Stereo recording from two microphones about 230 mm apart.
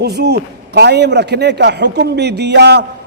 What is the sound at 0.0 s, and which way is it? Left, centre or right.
A man's voice, right.